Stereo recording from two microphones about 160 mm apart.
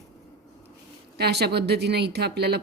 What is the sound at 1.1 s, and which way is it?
Speech, 90° right.